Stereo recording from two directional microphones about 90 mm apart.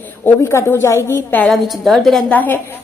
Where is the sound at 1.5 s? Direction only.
Centre (ahead or behind).